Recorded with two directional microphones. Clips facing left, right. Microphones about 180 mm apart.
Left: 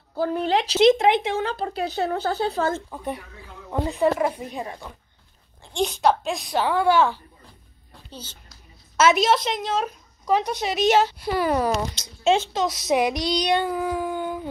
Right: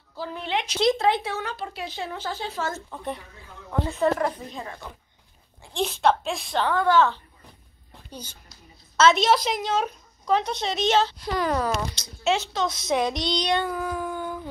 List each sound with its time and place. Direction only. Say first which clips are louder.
0.1 s speech: left 7 dB; 50° left (ahead or behind)
0.7 s speech: left 5 dB; 20° left (ahead or behind)
2.9 s a woman's voice: left 2 dB; 10° left (ahead or behind)
5.7 s a woman's voice: left 1 dB; centre (ahead or behind)
8.1 s speech: even; 10° right (ahead or behind)
8.9 s a woman's voice: even; 10° left (ahead or behind)
12.9 s speech: left 3 dB; 5° left (ahead or behind)